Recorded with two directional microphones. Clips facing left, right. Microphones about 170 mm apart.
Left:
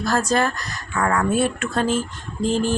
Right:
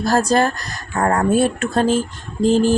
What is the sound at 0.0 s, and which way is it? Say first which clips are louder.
Speech: right 4 dB; 35° right (ahead or behind).